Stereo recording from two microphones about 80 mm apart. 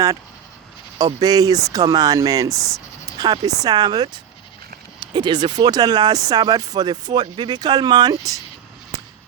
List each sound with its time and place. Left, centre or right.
0.9 s speech: right
3.1 s speech: right
8.9 s a sound: right